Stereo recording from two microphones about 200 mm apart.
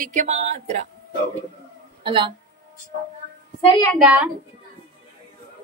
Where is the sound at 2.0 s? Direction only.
25° right (ahead or behind).